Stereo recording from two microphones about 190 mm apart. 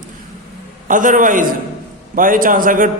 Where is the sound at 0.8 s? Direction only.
45° right (ahead or behind).